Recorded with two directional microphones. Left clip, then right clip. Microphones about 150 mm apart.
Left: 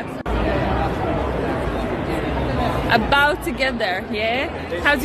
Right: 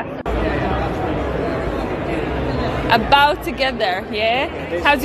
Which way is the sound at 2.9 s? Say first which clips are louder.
Right 4 dB; 10° left (ahead or behind).